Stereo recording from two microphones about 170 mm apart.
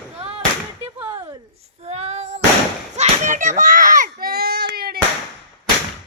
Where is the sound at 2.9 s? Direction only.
45° right (ahead or behind); by 4.6 s 65° right (ahead or behind).